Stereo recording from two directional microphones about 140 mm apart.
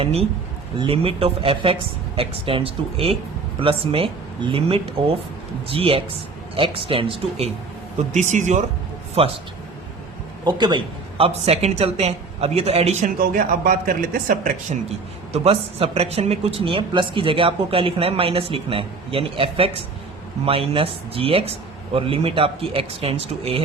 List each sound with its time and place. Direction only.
0.0 s a woman's voice: 45° right (ahead or behind)
8.1 s speech: 60° right (ahead or behind)
9.2 s a woman's voice: 45° right (ahead or behind)
10.4 s a man's voice: 30° right (ahead or behind)
11.4 s a woman's voice: 50° right (ahead or behind)
13.1 s speech: 75° right (ahead or behind)
14.8 s speech: 45° right (ahead or behind)